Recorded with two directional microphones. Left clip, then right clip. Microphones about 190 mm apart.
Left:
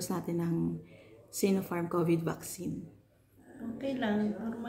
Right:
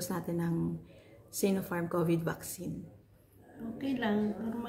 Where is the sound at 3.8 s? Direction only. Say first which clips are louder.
Even; 20° right (ahead or behind).